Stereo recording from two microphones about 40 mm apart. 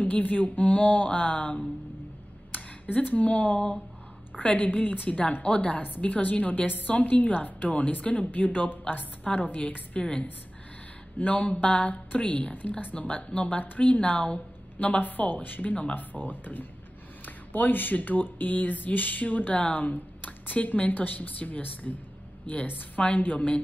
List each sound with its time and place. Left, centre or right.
0.0 s a woman's voice: left
2.5 s a woman's voice: left
9.9 s a woman's voice: left
11.1 s a woman's voice: left